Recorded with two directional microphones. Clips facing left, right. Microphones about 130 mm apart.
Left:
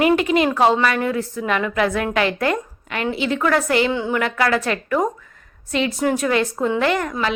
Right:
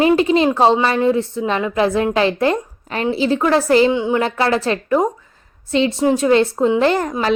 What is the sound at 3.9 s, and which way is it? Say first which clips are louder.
Speech: right 4 dB; 20° right (ahead or behind).